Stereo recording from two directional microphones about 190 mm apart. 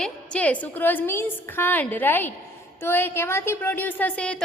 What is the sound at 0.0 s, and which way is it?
A woman's voice, 5° left (ahead or behind).